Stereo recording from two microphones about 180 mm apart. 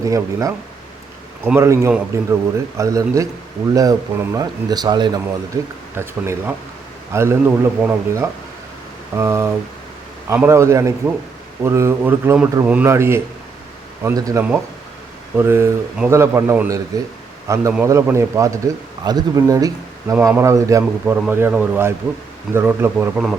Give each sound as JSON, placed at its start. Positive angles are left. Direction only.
{"t": 0.0, "sound": "a man's voice", "side_deg": -20}